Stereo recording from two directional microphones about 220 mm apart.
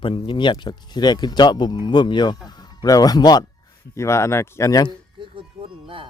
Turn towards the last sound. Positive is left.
turn(degrees=-25)  # may be behind; listen again after turning